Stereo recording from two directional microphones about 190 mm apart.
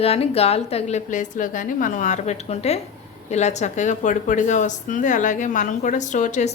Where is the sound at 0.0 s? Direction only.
30° left (ahead or behind).